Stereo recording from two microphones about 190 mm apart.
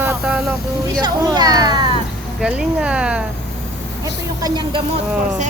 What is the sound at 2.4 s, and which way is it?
Speech, 5° right (ahead or behind).